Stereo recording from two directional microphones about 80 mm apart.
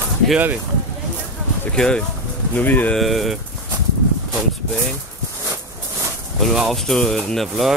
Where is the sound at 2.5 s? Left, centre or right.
Left.